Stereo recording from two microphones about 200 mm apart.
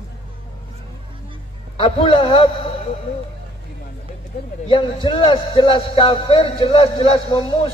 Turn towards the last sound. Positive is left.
turn(degrees=25)  # may be behind; listen again after turning